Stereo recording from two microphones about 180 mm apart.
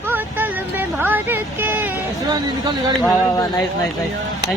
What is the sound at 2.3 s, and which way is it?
Speech, 20° right (ahead or behind).